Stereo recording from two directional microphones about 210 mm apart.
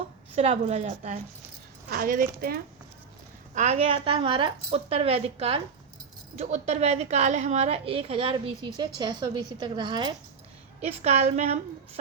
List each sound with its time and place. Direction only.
0.3 s a woman's voice: 30° right (ahead or behind)
3.5 s a woman's voice: 35° right (ahead or behind)